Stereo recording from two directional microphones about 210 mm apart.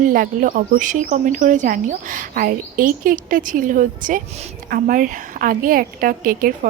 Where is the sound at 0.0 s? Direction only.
40° right (ahead or behind).